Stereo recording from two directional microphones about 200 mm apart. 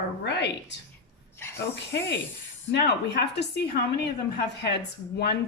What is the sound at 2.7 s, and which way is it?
Speech, 55° left (ahead or behind).